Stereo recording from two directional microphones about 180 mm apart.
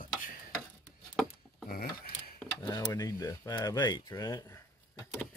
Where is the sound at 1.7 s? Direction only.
55° left (ahead or behind).